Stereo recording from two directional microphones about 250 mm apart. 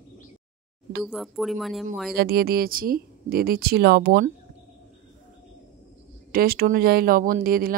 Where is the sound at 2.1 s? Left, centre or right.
Right.